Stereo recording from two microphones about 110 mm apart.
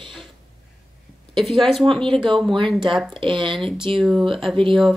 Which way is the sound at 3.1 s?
50° right (ahead or behind).